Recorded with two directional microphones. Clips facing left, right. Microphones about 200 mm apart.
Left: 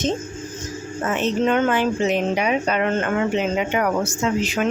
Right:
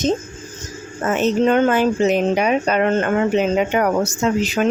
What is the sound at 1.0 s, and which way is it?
A woman's voice, 40° right (ahead or behind).